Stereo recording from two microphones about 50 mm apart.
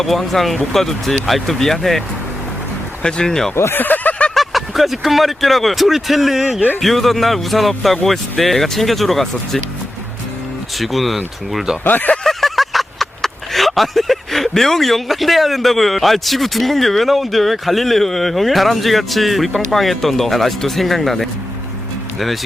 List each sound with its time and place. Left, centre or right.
0.0 s speech: centre
3.0 s speech: centre
3.5 s speech: left
3.8 s a sound: left
4.4 s speech: centre
10.8 s speech: centre
11.5 s speech: centre
11.9 s speech: left
12.2 s speech: centre